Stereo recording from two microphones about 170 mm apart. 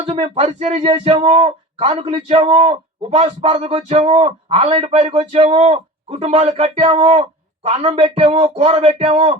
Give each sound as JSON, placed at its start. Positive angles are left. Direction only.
{"t": 0.0, "sound": "speech", "side_deg": -35}